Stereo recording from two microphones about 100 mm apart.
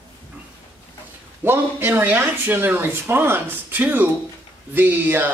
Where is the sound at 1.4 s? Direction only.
20° right (ahead or behind).